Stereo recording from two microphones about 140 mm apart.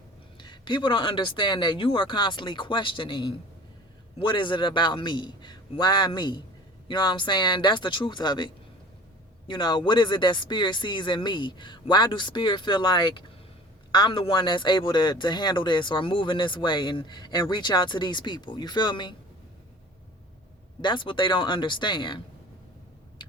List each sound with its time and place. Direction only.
0.3 s speech: 35° left (ahead or behind)
20.8 s speech: 35° left (ahead or behind)